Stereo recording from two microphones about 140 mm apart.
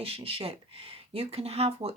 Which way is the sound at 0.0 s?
40° right (ahead or behind).